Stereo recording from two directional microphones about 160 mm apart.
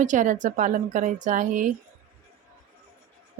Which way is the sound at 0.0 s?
50° right (ahead or behind).